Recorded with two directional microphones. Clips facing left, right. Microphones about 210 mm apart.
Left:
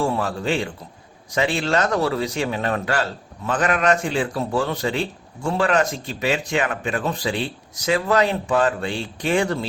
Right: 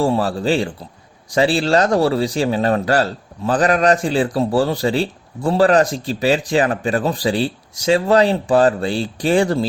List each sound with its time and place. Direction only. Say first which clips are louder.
0.0 s speech: right 5 dB; 35° right (ahead or behind)